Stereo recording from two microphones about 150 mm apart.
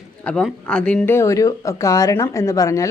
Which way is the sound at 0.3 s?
5° left (ahead or behind).